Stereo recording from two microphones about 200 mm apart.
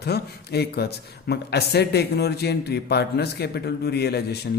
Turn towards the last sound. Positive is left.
turn(degrees=55)  # may be behind; listen again after turning